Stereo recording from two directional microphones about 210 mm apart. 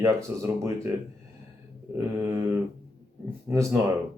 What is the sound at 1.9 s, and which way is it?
Speech, 15° right (ahead or behind).